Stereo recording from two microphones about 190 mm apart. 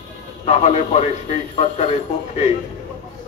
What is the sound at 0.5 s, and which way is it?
Speech, 35° left (ahead or behind).